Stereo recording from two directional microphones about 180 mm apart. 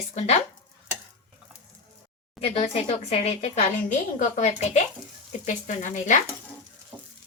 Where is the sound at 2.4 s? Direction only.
35° left (ahead or behind).